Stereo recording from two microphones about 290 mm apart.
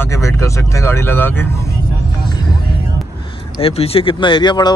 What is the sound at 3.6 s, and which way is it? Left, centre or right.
Speech, centre.